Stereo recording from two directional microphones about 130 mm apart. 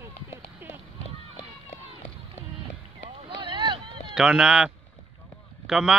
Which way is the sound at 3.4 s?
35° right (ahead or behind).